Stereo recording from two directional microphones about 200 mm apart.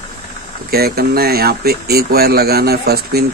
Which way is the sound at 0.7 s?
50° right (ahead or behind).